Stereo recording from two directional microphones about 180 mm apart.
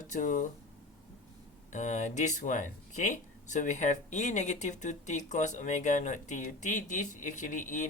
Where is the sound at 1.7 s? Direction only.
40° left (ahead or behind).